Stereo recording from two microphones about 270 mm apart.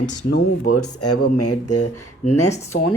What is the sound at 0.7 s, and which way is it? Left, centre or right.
Speech, left.